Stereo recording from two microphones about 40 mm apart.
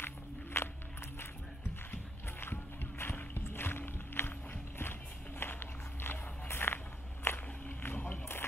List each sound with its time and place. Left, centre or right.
0.0 s walk: left
2.4 s music: left
5.4 s a sound: left